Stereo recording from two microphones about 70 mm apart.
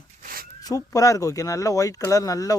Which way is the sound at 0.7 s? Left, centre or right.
Left.